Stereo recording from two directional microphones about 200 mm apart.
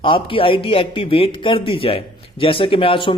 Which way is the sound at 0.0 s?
25° left (ahead or behind).